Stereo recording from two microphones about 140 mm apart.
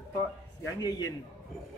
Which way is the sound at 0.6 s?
25° left (ahead or behind).